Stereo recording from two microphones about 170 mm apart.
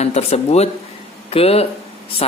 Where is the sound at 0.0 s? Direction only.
40° left (ahead or behind).